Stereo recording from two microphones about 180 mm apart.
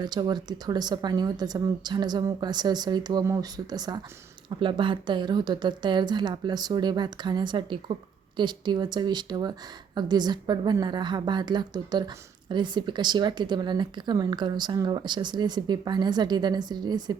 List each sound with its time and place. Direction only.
0.0 s speech: 25° right (ahead or behind)